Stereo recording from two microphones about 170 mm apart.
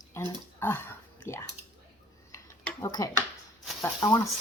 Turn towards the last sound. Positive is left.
turn(degrees=15)  # may be behind; listen again after turning